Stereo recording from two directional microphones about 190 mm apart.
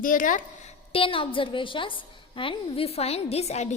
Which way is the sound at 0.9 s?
30° left (ahead or behind).